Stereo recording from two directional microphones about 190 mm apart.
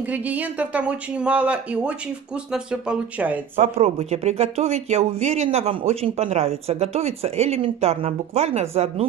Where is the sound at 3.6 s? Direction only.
35° right (ahead or behind).